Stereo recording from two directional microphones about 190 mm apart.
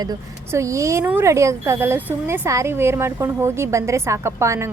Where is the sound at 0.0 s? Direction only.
20° right (ahead or behind).